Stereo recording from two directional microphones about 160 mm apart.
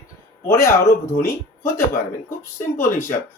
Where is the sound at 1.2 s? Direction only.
15° left (ahead or behind).